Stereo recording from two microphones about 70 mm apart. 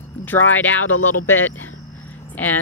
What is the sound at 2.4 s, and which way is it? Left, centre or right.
Speech, left.